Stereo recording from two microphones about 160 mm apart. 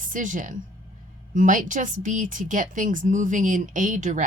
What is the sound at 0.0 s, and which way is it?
Speech, 55° right (ahead or behind).